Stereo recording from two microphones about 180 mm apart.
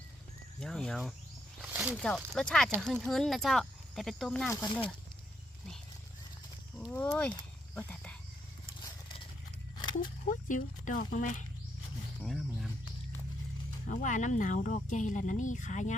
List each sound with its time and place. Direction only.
0.6 s speech: 5° left (ahead or behind)
1.6 s speech: 10° right (ahead or behind)
2.0 s speech: 5° left (ahead or behind)
4.5 s speech: 25° left (ahead or behind)
6.9 s speech: 5° left (ahead or behind)
7.8 s dog: 10° left (ahead or behind)
10.2 s speech: 45° left (ahead or behind)
12.2 s a sound: centre (ahead or behind)
13.8 s speech: 45° left (ahead or behind)